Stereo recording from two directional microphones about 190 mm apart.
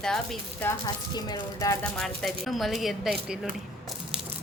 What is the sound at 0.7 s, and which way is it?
Speech, 20° left (ahead or behind).